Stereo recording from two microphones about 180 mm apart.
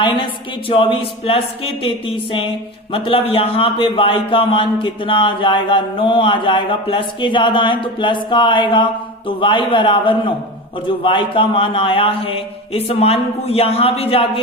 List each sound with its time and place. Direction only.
0.0 s a man's voice: 25° left (ahead or behind)